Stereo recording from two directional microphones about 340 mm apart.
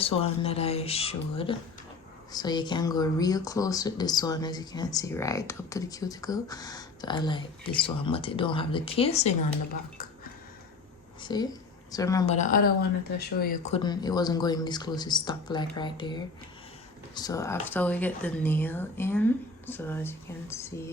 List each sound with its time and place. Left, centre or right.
0.0 s speech: centre
11.2 s a woman's voice: centre